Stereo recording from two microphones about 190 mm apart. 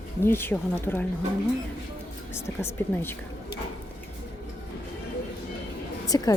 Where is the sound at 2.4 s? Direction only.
10° left (ahead or behind).